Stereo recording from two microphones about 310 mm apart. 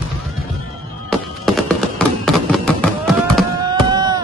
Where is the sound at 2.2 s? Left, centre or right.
Centre.